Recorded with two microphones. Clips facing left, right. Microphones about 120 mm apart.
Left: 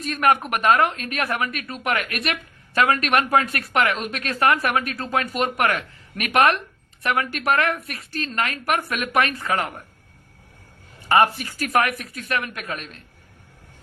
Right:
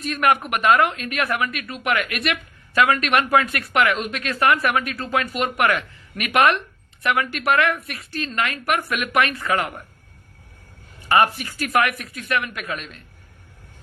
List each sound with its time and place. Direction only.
0.0 s speech: 35° left (ahead or behind)
11.2 s speech: 35° left (ahead or behind)